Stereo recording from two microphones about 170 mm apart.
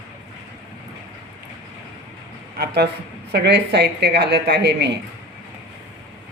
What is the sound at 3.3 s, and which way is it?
Speech, 80° right.